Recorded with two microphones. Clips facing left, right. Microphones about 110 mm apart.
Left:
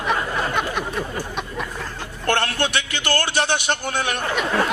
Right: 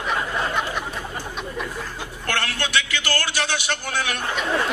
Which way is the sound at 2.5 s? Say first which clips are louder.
Left 2 dB; 25° left (ahead or behind).